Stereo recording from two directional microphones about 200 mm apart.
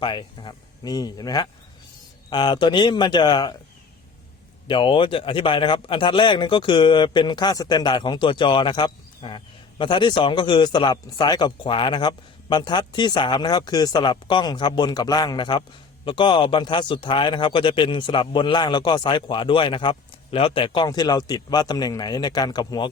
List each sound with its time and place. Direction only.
0.0 s a man's voice: 25° left (ahead or behind)
4.7 s a man's voice: 25° left (ahead or behind)